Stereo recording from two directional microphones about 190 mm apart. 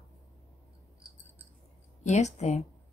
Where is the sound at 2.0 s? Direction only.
35° left (ahead or behind).